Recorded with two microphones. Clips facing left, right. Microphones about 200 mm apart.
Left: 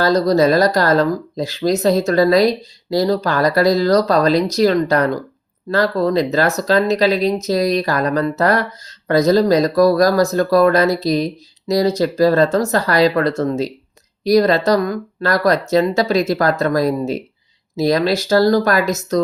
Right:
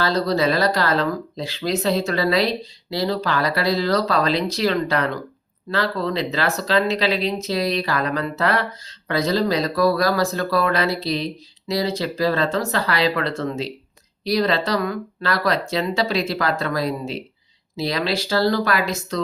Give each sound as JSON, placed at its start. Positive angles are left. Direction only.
{"t": 0.0, "sound": "speech", "side_deg": 45}